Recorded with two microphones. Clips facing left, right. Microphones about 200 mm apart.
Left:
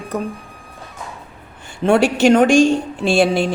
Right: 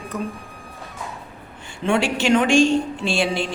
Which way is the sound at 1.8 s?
40° left (ahead or behind).